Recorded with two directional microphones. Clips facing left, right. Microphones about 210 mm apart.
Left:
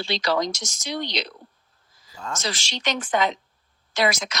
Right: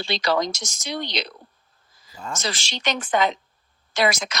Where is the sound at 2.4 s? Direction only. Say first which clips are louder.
Right 1 dB; 55° right (ahead or behind).